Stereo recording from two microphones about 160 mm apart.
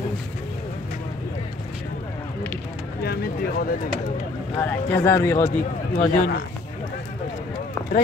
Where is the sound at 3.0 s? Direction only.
75° left (ahead or behind).